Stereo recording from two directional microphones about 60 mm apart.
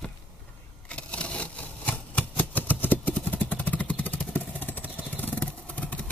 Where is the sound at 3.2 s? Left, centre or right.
Left.